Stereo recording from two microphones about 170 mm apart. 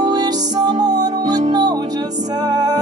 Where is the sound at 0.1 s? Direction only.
25° right (ahead or behind).